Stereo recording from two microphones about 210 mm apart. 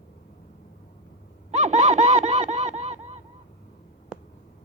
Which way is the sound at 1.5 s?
35° right (ahead or behind).